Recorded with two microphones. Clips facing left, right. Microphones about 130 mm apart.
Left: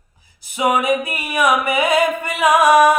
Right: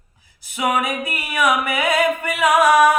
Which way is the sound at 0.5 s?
20° left (ahead or behind).